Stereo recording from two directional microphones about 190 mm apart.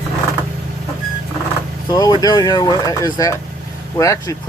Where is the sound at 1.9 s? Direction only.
20° left (ahead or behind).